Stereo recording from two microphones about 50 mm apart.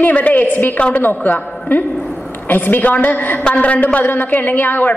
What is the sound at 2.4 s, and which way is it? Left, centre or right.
A woman's voice, left.